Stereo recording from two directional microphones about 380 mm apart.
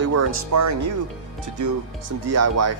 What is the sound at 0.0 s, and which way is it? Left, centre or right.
Speech, right.